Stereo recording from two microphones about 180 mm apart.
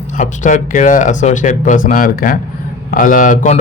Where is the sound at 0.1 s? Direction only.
45° left (ahead or behind).